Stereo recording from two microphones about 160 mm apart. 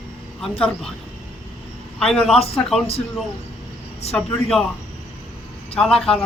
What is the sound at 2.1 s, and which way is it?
Speech, 5° left (ahead or behind).